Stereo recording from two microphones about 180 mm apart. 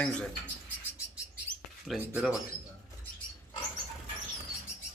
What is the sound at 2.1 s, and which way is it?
Speech, 5° right (ahead or behind).